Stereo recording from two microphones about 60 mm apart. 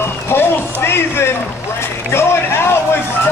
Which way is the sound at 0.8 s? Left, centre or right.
Left.